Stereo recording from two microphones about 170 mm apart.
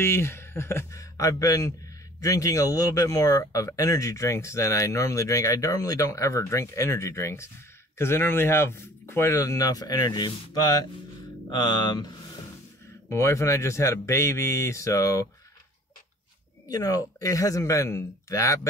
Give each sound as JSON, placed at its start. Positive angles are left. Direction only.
{"t": 0.0, "sound": "speech", "side_deg": 15}
{"t": 13.1, "sound": "speech", "side_deg": 15}
{"t": 16.6, "sound": "speech", "side_deg": 20}